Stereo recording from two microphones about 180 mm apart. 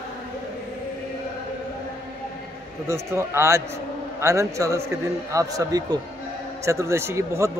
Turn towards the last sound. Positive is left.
turn(degrees=-15)  # may be behind; listen again after turning